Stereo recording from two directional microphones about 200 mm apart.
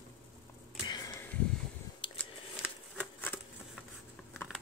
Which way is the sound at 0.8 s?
15° left (ahead or behind).